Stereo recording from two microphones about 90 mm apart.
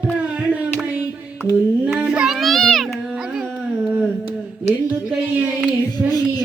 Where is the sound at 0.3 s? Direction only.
15° right (ahead or behind).